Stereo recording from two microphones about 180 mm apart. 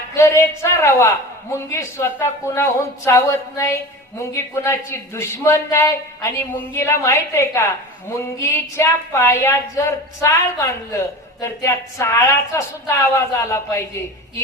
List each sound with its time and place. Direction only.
0.1 s a woman's voice: 15° left (ahead or behind)